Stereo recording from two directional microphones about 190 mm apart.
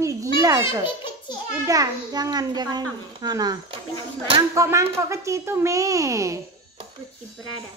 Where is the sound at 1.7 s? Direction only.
20° right (ahead or behind).